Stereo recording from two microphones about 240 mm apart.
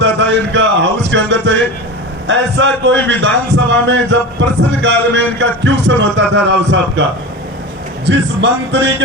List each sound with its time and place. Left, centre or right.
0.0 s music: right
2.2 s a man's voice: right
8.0 s a man's voice: right